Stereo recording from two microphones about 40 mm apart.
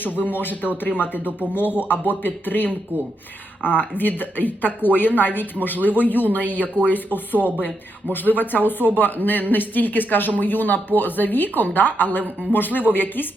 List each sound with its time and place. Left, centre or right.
0.0 s speech: left
3.8 s speech: left